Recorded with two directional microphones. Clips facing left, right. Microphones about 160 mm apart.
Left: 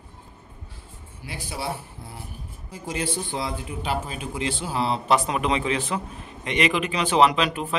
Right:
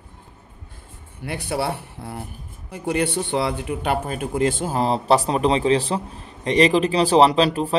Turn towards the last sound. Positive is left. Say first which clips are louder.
# right 6 dB
turn(degrees=-35)  # may be behind; listen again after turning